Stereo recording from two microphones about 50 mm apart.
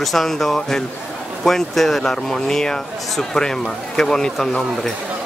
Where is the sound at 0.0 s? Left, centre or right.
Centre.